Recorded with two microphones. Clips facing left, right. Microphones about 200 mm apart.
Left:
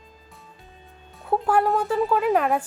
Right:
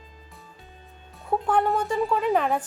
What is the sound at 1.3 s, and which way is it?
Speech, 5° left (ahead or behind).